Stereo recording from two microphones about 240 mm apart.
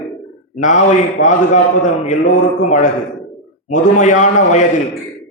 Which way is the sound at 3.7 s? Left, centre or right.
Left.